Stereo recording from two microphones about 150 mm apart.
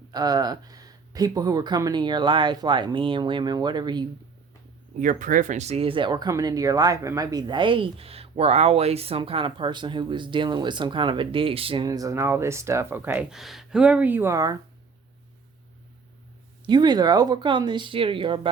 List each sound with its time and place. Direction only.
0.1 s speech: 25° right (ahead or behind)
4.9 s speech: 60° right (ahead or behind); by 11.9 s 35° right (ahead or behind)
11.9 s speech: 25° right (ahead or behind)
16.6 s speech: 30° right (ahead or behind)